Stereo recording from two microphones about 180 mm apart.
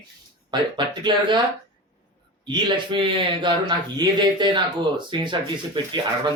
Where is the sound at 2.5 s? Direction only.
25° right (ahead or behind).